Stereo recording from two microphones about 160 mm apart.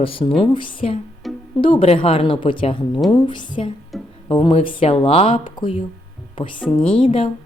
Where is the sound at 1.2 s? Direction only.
Centre (ahead or behind).